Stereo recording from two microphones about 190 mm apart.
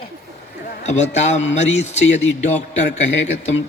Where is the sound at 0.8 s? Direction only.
35° left (ahead or behind).